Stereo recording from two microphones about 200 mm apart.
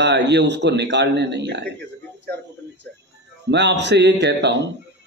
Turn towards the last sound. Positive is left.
turn(degrees=-60)  # may be behind; listen again after turning